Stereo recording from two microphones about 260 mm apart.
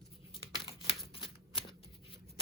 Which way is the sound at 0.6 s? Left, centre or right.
Centre.